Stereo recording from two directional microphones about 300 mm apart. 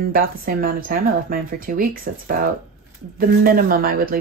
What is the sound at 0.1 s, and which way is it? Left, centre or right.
Speech, right.